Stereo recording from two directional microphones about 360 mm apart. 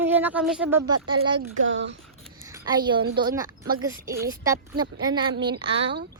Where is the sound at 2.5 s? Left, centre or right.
Centre.